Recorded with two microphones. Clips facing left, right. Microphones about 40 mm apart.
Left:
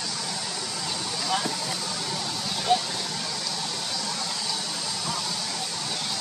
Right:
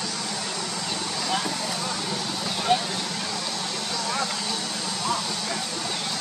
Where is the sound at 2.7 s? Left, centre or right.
Right.